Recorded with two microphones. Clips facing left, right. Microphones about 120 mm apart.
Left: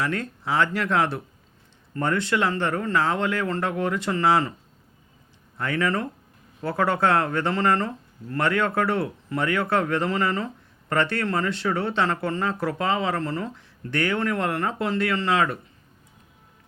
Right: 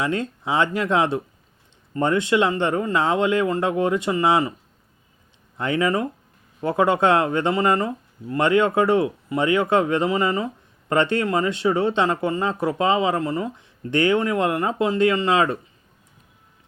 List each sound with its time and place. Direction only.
0.0 s speech: 20° right (ahead or behind)
5.5 s speech: 20° right (ahead or behind)